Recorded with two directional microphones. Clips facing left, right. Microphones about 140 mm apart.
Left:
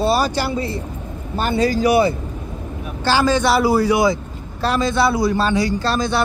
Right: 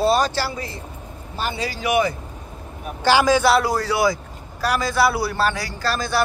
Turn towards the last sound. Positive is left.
turn(degrees=20)  # may be behind; listen again after turning